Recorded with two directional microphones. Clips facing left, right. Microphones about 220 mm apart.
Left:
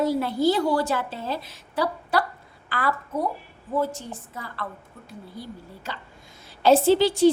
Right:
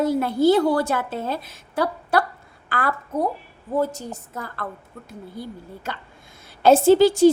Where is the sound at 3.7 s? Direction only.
40° right (ahead or behind).